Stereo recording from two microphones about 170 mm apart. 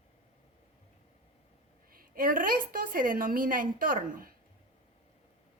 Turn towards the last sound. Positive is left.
turn(degrees=-55)  # may be behind; listen again after turning